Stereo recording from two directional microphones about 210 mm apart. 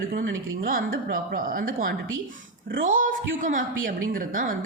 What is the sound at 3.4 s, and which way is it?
A woman's voice, 35° right (ahead or behind).